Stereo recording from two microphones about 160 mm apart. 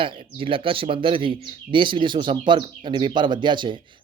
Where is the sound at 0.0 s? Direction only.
35° right (ahead or behind).